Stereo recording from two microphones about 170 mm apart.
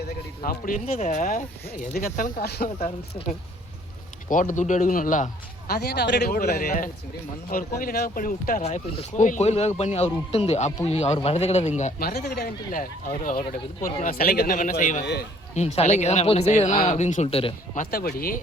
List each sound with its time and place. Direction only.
0.4 s speech: 55° left (ahead or behind)
2.7 s speech: 35° left (ahead or behind)
4.3 s speech: 50° left (ahead or behind)
5.6 s speech: 70° left (ahead or behind)
8.6 s speech: 40° left (ahead or behind)
11.9 s speech: 65° left (ahead or behind); by 15.0 s 50° left (ahead or behind)
15.0 s speech: 75° left (ahead or behind)
15.5 s speech: 40° left (ahead or behind)
17.7 s speech: 60° left (ahead or behind)